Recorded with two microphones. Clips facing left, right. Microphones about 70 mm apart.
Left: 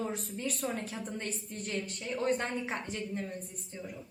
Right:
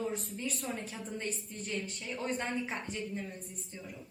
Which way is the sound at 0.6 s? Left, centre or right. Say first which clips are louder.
Left 6 dB; left.